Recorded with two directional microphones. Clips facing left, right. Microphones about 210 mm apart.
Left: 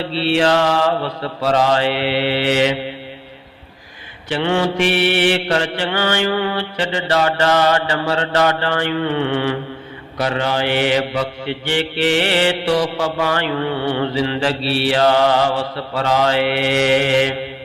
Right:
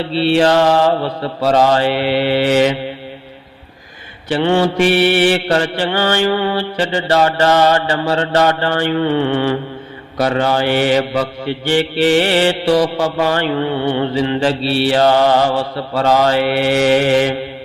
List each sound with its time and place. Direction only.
0.2 s mantra: 35° right (ahead or behind)
4.3 s mantra: 35° right (ahead or behind)
13.8 s mantra: 20° right (ahead or behind)
14.8 s mantra: 35° right (ahead or behind)